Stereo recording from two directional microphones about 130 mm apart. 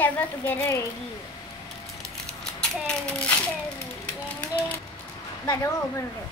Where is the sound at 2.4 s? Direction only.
5° left (ahead or behind).